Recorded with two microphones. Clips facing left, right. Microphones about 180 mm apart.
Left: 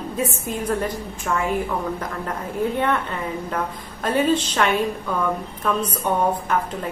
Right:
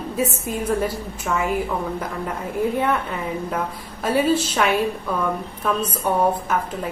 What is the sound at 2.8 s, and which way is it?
A woman's voice, 5° right (ahead or behind).